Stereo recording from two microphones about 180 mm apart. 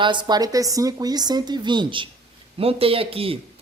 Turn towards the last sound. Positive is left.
turn(degrees=-30)  # may be behind; listen again after turning